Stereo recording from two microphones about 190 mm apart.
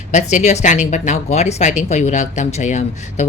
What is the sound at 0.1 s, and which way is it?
Speech, 40° left (ahead or behind).